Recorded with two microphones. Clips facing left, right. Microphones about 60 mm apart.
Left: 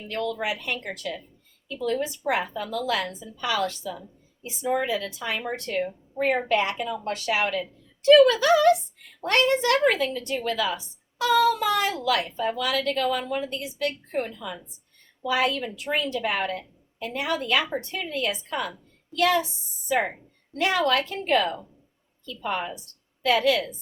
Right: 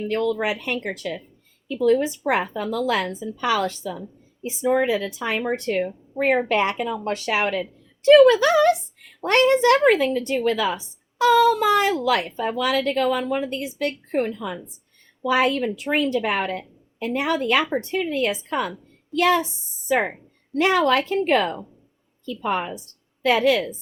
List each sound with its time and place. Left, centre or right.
0.1 s speech: right
10.7 s speech: right
17.6 s speech: centre
19.1 s speech: right